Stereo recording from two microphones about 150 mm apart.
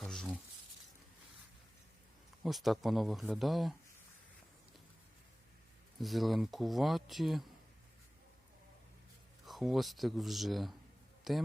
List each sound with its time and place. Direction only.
0.0 s a sound: centre (ahead or behind)
2.4 s speech: centre (ahead or behind)
6.0 s speech: centre (ahead or behind)
9.5 s a man's voice: centre (ahead or behind)